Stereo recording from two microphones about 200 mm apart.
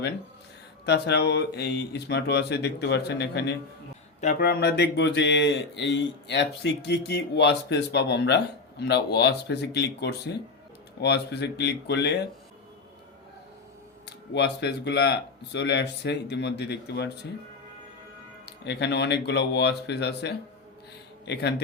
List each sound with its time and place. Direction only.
0.9 s speech: 55° left (ahead or behind)
14.0 s speech: 55° left (ahead or behind)
18.4 s speech: 60° left (ahead or behind)